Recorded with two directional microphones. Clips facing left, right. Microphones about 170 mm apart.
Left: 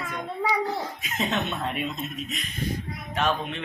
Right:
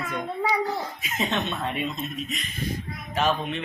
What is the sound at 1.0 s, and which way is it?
Speech, centre (ahead or behind).